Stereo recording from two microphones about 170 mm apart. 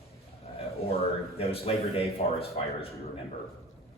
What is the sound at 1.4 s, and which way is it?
A man's voice, 35° left (ahead or behind).